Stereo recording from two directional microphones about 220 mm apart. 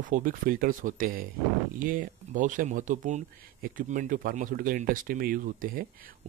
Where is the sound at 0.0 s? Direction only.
40° right (ahead or behind).